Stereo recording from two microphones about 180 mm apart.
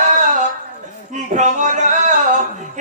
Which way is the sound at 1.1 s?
45° right (ahead or behind).